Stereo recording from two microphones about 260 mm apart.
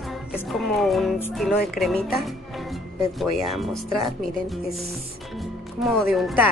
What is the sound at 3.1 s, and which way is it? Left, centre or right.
Speech, centre.